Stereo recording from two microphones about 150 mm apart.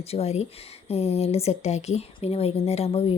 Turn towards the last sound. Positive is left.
turn(degrees=40)  # may be behind; listen again after turning